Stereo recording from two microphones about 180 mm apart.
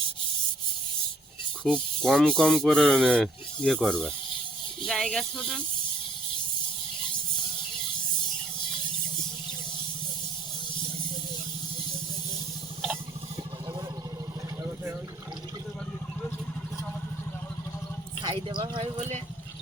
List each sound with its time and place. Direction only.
1.6 s speech: 5° left (ahead or behind)
18.2 s speech: 25° right (ahead or behind)